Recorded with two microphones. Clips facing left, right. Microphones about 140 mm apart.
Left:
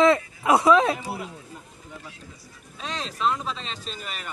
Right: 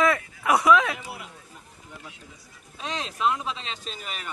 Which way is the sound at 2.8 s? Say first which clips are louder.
Even; 5° right (ahead or behind).